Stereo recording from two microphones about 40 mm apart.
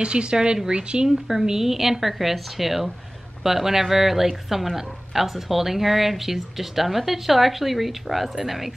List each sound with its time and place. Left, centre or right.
0.0 s speech: right
1.0 s speech: centre